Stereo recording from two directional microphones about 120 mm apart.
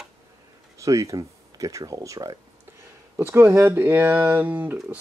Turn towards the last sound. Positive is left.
turn(degrees=-15)  # may be behind; listen again after turning